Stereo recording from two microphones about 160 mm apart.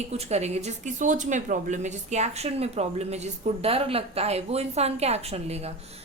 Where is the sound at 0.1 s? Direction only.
40° right (ahead or behind).